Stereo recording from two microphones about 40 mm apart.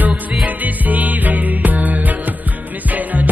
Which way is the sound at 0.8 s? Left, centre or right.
Right.